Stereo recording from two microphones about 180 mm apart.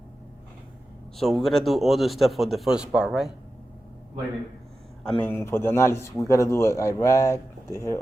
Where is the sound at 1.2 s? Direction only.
Centre (ahead or behind).